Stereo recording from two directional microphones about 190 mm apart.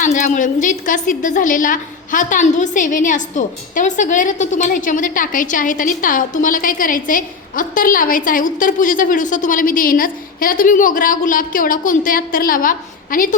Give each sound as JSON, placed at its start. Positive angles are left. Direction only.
{"t": 0.0, "sound": "a woman's voice", "side_deg": 40}